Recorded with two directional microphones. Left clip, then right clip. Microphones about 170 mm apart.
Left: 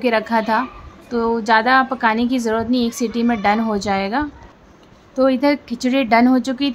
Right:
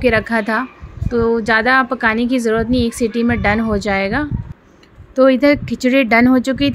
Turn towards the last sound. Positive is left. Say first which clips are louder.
# right 3 dB
turn(degrees=-15)  # may be behind; listen again after turning